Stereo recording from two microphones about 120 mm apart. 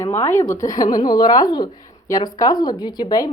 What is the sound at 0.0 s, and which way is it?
A woman's voice, 20° left (ahead or behind).